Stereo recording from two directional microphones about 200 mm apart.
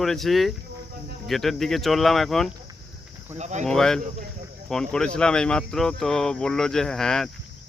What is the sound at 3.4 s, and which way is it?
Speech, 35° right (ahead or behind).